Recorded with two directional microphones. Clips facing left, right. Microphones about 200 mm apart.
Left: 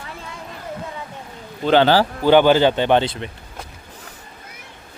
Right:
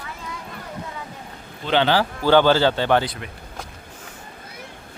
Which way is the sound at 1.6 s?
45° left (ahead or behind).